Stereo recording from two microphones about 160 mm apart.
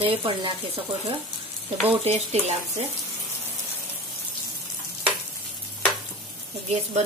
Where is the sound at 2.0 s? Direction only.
40° right (ahead or behind).